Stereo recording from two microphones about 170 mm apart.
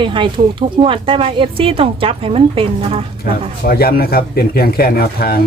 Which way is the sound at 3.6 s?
65° left (ahead or behind).